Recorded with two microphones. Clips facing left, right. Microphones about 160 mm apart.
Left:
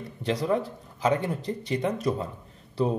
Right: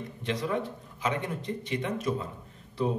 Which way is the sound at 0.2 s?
35° left (ahead or behind).